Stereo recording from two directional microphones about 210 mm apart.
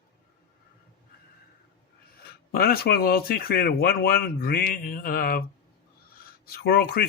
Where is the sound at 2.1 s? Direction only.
45° left (ahead or behind).